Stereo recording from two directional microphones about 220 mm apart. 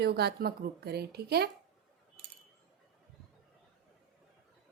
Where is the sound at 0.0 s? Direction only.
45° right (ahead or behind).